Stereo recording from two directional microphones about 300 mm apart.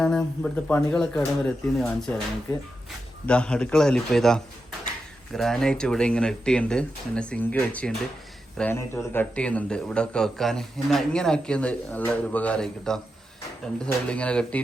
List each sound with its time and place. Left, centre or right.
0.0 s a man's voice: centre